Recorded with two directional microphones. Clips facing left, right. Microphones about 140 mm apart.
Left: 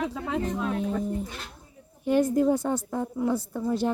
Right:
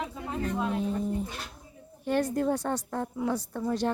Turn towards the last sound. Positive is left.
turn(degrees=10)  # may be behind; listen again after turning